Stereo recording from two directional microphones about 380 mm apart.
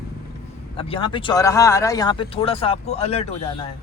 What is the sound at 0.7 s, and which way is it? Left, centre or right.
Speech, centre.